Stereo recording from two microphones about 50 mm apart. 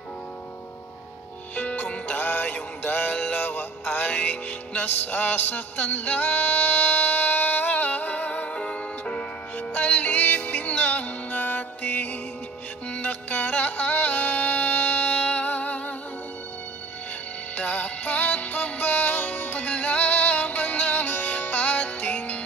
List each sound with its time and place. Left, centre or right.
1.5 s music: left
8.5 s music: centre
9.6 s music: left
12.9 s music: left
17.6 s music: left